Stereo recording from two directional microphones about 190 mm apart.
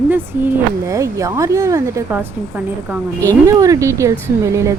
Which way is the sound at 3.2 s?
15° right (ahead or behind).